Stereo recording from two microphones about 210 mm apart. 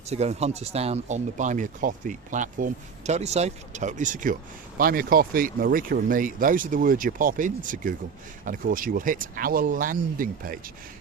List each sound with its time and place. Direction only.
0.1 s speech: 30° right (ahead or behind)